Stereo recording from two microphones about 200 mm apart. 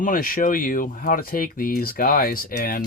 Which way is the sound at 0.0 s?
45° left (ahead or behind).